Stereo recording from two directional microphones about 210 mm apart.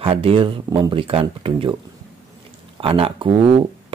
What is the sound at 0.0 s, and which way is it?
Speech, 25° right (ahead or behind).